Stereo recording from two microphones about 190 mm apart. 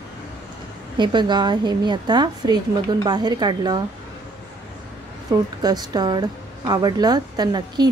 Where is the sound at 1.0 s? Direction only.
25° right (ahead or behind).